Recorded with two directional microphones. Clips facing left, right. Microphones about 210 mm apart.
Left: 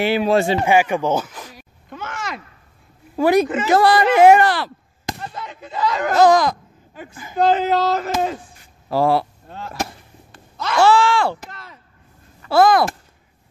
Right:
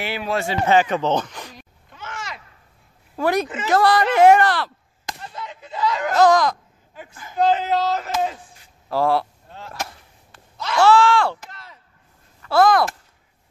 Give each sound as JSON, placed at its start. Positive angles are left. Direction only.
{"t": 0.0, "sound": "a man's voice", "side_deg": 25}
{"t": 0.7, "sound": "speech", "side_deg": 10}
{"t": 1.9, "sound": "a sound", "side_deg": 50}
{"t": 3.2, "sound": "speech", "side_deg": 5}
{"t": 5.2, "sound": "a sound", "side_deg": 45}
{"t": 6.1, "sound": "speech", "side_deg": 0}
{"t": 7.4, "sound": "speech", "side_deg": 40}
{"t": 8.2, "sound": "a sound", "side_deg": 50}
{"t": 8.8, "sound": "speech", "side_deg": 5}
{"t": 10.8, "sound": "groan", "side_deg": 0}
{"t": 11.5, "sound": "chop", "side_deg": 50}
{"t": 12.4, "sound": "speech", "side_deg": 5}